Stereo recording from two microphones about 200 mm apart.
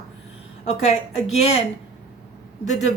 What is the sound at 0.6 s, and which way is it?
Speech, 35° left (ahead or behind).